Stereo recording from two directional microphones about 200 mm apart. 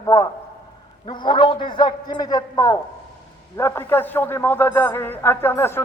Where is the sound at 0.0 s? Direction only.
15° left (ahead or behind).